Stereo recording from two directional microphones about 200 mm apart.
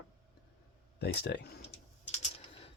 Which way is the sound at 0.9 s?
55° left (ahead or behind).